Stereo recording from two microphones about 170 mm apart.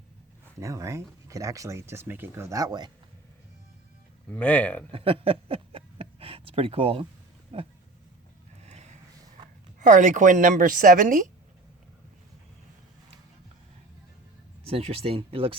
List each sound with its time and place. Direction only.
0.6 s speech: 20° right (ahead or behind)
4.3 s speech: 10° left (ahead or behind)
4.9 s a sound: 35° right (ahead or behind)
7.5 s speech: 35° right (ahead or behind)
8.6 s a sound: 40° right (ahead or behind)
9.8 s a woman's voice: 50° right (ahead or behind)
14.7 s speech: 35° right (ahead or behind)